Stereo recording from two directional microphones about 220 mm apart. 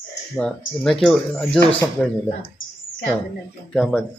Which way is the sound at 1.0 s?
5° left (ahead or behind).